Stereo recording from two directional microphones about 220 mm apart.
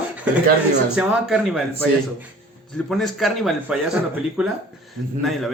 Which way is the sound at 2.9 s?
Centre (ahead or behind).